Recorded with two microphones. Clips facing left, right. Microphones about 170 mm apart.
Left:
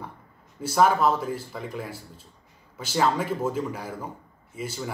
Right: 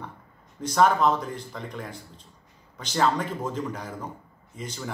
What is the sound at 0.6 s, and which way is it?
A man's voice, 5° left (ahead or behind).